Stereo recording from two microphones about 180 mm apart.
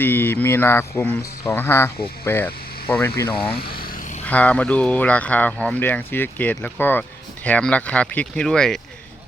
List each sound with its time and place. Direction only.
0.0 s speech: 10° left (ahead or behind)
3.6 s vehicle: 55° left (ahead or behind)
4.3 s speech: 5° left (ahead or behind)